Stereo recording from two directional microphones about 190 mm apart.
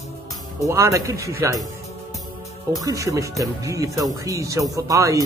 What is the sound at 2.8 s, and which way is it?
Speech, 15° right (ahead or behind).